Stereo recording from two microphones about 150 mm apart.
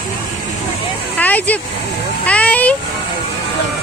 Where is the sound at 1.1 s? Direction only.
10° left (ahead or behind).